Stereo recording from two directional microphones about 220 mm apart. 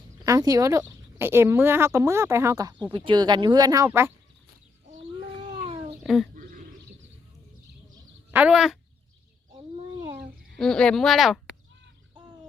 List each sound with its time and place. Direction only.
0.3 s speech: 15° right (ahead or behind)
5.5 s cat: 20° right (ahead or behind)
6.0 s a sound: centre (ahead or behind)
8.3 s speech: 5° right (ahead or behind)
10.6 s speech: 5° left (ahead or behind)